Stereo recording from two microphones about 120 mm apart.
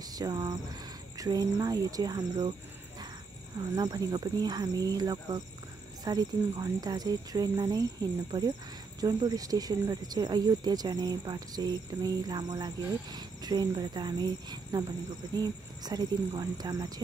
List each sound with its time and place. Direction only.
0.0 s speech: 30° right (ahead or behind)
3.5 s speech: 35° right (ahead or behind)